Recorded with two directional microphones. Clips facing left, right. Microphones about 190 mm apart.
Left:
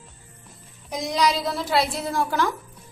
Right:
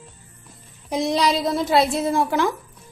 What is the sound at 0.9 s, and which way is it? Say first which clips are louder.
Speech: right 3 dB; 25° right (ahead or behind).